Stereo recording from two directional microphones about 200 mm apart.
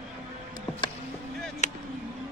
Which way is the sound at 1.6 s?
35° left (ahead or behind).